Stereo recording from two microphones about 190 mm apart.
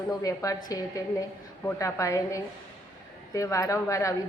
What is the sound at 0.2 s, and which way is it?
Speech, 15° left (ahead or behind).